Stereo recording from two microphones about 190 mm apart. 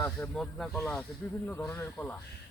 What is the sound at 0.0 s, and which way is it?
Speech, 5° left (ahead or behind).